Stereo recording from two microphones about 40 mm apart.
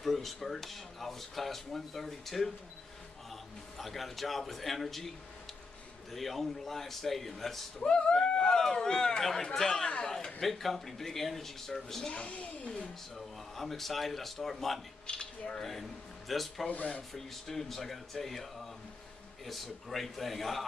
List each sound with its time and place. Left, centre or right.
0.0 s speech: centre
3.7 s speech: centre
6.1 s speech: centre
7.8 s speech: centre
10.0 s a sound: centre
10.4 s speech: centre
12.1 s speech: left
13.6 s speech: centre
15.0 s speech: left
16.3 s speech: centre
16.7 s speech: left
17.1 s speech: centre